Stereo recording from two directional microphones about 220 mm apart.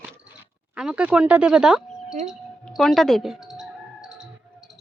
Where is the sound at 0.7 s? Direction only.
5° right (ahead or behind).